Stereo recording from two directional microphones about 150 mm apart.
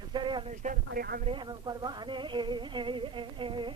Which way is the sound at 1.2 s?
30° right (ahead or behind).